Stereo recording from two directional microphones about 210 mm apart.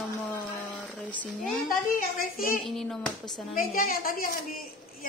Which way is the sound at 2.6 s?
Centre (ahead or behind).